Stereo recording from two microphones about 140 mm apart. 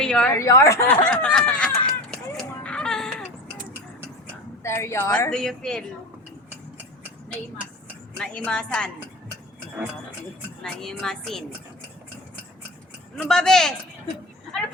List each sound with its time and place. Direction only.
0.0 s a woman's voice: 5° left (ahead or behind)
0.3 s a woman's voice: 20° left (ahead or behind)
0.9 s a sound: 10° left (ahead or behind)
4.6 s a woman's voice: 20° left (ahead or behind)
5.1 s a woman's voice: 10° left (ahead or behind)
8.2 s a woman's voice: 5° left (ahead or behind)
10.6 s a woman's voice: 5° left (ahead or behind)
13.1 s a woman's voice: 5° left (ahead or behind)